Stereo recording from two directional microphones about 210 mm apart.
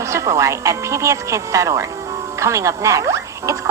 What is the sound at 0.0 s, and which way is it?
Speech, 15° right (ahead or behind).